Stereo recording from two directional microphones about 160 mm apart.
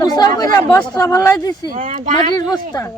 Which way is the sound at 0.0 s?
25° left (ahead or behind).